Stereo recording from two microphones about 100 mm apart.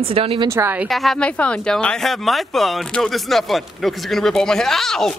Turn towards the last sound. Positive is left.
turn(degrees=5)  # may be behind; listen again after turning